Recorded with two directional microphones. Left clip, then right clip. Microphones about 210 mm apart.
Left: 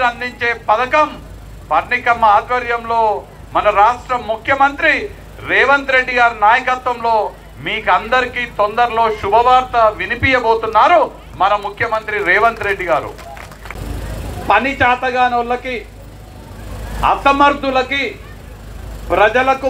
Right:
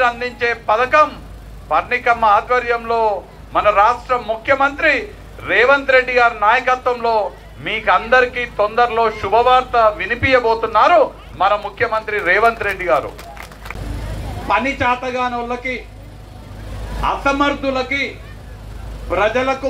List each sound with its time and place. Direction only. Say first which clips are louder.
0.0 s a man's voice: even; 10° right (ahead or behind)
14.5 s speech: left 4 dB; 25° left (ahead or behind)
17.0 s speech: left 5 dB; 25° left (ahead or behind)
19.0 s speech: left 4 dB; 20° left (ahead or behind)